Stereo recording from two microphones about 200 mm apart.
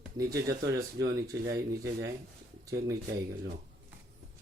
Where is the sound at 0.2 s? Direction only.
15° right (ahead or behind).